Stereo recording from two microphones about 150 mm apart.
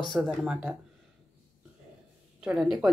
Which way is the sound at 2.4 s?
5° right (ahead or behind).